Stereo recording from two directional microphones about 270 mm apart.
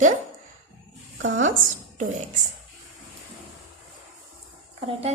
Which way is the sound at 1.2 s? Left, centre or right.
Right.